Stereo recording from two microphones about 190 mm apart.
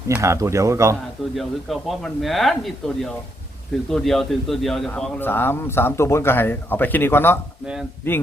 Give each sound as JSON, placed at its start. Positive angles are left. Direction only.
{"t": 0.1, "sound": "speech", "side_deg": -15}
{"t": 1.4, "sound": "speech", "side_deg": 0}